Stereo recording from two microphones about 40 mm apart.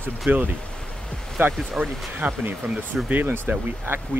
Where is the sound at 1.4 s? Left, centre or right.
Right.